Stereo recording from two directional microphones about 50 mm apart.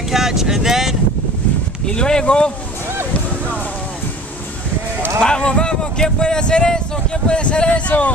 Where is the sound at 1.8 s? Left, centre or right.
Centre.